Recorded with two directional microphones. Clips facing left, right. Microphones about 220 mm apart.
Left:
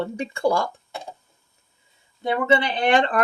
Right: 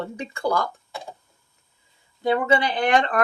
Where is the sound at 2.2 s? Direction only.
25° left (ahead or behind).